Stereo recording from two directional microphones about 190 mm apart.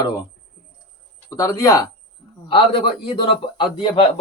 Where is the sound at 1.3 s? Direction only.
20° left (ahead or behind).